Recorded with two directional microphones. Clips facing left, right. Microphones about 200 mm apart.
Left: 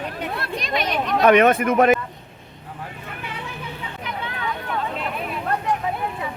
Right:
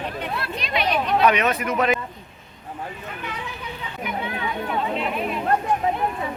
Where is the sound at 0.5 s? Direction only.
45° left (ahead or behind).